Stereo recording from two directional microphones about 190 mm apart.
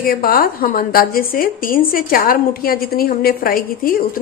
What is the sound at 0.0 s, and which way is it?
A woman's voice, 50° left (ahead or behind).